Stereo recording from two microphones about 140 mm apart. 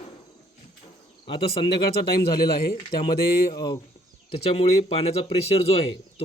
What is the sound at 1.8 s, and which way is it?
Speech, 90° left.